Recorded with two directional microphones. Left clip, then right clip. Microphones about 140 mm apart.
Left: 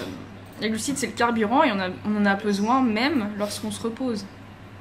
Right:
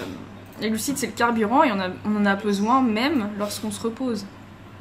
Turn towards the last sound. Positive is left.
turn(degrees=-15)  # may be behind; listen again after turning